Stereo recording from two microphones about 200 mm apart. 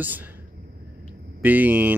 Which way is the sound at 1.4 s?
10° right (ahead or behind).